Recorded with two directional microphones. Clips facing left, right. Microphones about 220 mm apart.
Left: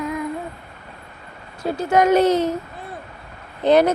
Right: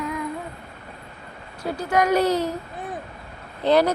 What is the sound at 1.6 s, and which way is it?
Speech, 25° left (ahead or behind).